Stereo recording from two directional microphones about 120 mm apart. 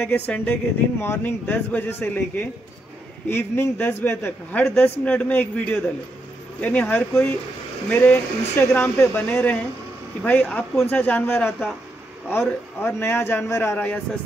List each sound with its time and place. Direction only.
0.0 s a man's voice: 15° left (ahead or behind)